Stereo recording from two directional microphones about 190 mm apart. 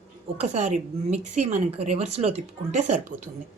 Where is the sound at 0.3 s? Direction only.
35° right (ahead or behind).